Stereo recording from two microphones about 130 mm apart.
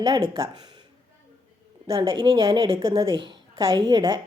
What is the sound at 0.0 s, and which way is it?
Speech, 35° right (ahead or behind).